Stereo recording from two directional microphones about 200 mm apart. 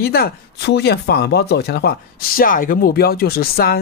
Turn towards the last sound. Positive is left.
turn(degrees=50)  # may be behind; listen again after turning